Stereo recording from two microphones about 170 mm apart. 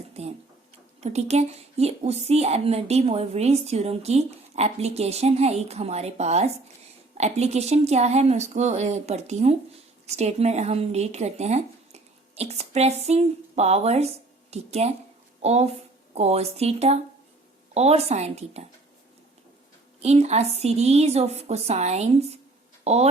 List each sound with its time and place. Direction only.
0.1 s a sound: 40° right (ahead or behind)
1.0 s speech: 40° right (ahead or behind)
20.0 s speech: 40° right (ahead or behind)